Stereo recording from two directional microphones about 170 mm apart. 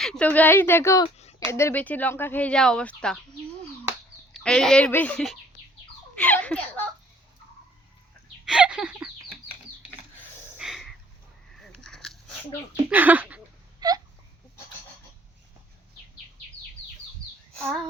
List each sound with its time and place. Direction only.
0.0 s speech: 5° left (ahead or behind)
1.0 s a sound: 40° left (ahead or behind)
1.5 s speech: 15° left (ahead or behind)
4.4 s speech: 5° left (ahead or behind)
8.4 s a sound: 5° right (ahead or behind)
10.6 s snort: centre (ahead or behind)
11.5 s biting: centre (ahead or behind)
12.9 s speech: 10° right (ahead or behind)
13.7 s hiccup: 20° right (ahead or behind)
17.5 s a sound: 5° left (ahead or behind)